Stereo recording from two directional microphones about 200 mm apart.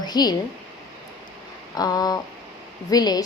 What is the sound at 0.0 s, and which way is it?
Speech, 20° left (ahead or behind).